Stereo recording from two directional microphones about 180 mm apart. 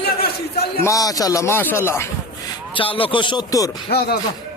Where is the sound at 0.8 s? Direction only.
20° left (ahead or behind).